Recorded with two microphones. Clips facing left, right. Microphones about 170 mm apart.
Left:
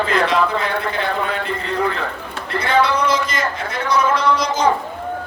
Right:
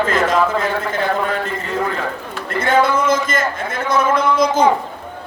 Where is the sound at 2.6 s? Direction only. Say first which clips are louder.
Right 2 dB; 50° right (ahead or behind).